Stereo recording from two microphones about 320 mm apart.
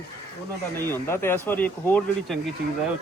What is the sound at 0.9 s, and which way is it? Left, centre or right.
Speech, centre.